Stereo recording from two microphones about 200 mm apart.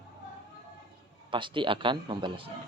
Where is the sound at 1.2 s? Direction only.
25° right (ahead or behind).